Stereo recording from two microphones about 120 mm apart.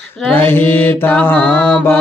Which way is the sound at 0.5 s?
20° left (ahead or behind).